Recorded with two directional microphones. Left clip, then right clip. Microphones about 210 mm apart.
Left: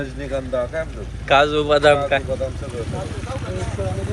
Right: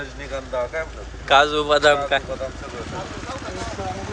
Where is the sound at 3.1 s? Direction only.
50° right (ahead or behind).